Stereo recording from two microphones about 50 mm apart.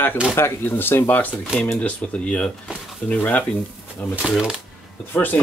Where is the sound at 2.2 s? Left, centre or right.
Left.